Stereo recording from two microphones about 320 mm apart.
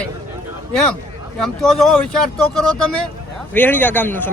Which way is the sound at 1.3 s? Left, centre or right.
Centre.